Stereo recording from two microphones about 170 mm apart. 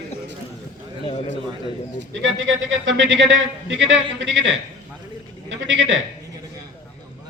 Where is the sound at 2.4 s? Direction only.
90° right.